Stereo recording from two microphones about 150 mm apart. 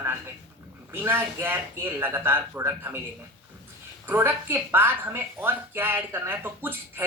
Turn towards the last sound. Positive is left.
turn(degrees=-15)  # may be behind; listen again after turning